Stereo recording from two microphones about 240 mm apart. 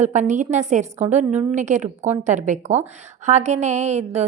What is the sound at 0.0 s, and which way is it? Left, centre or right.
A woman's voice, right.